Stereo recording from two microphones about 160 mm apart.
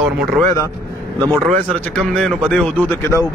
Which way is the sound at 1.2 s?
25° right (ahead or behind).